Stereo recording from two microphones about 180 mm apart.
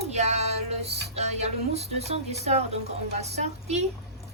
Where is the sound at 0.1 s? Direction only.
40° right (ahead or behind).